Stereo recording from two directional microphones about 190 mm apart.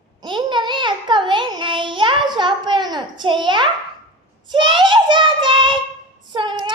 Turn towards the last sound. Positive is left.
turn(degrees=-25)  # may be behind; listen again after turning